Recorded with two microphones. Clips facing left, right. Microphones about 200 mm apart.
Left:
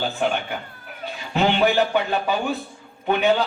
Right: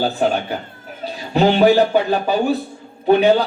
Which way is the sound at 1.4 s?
35° right (ahead or behind).